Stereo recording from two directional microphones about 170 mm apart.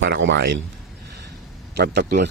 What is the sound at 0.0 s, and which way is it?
Speech, 90° right.